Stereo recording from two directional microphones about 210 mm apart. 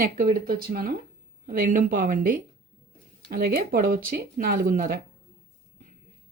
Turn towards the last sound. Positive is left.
turn(degrees=-45)  # may be behind; listen again after turning